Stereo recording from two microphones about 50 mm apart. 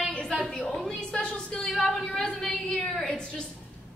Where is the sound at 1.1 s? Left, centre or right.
Centre.